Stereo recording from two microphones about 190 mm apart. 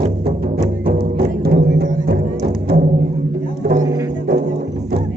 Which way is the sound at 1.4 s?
55° right (ahead or behind).